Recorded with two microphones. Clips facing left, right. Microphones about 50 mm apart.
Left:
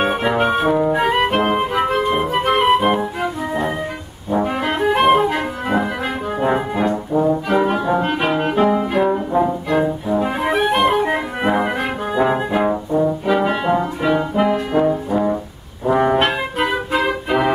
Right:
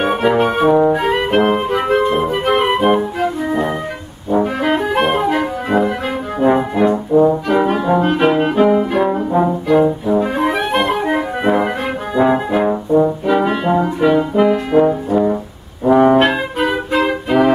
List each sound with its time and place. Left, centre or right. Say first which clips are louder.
0.1 s music: right 3 dB; centre
4.3 s brass instrument: right 4 dB; centre
7.4 s music: right 2 dB; centre
8.3 s brass instrument: right 2 dB; centre
9.8 s music: right 5 dB; centre
10.2 s brass instrument: right 1 dB; centre